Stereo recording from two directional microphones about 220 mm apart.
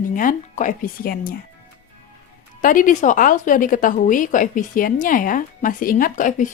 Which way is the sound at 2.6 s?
35° left (ahead or behind).